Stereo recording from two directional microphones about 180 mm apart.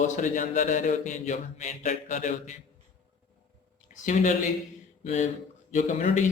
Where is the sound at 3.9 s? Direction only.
40° left (ahead or behind).